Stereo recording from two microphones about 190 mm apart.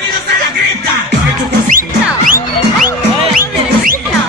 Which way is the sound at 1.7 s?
45° right (ahead or behind).